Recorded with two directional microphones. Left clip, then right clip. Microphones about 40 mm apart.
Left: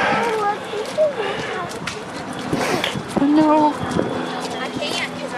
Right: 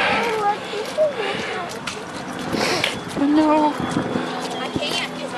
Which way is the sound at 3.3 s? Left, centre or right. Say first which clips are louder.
Left 2 dB; left.